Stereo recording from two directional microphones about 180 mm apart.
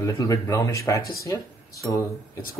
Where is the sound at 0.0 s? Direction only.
20° left (ahead or behind).